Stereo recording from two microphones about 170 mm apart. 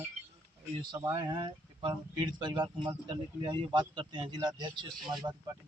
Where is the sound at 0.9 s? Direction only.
30° right (ahead or behind).